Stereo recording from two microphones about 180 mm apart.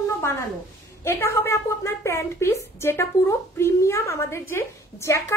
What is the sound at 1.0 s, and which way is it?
A woman's voice, 15° left (ahead or behind).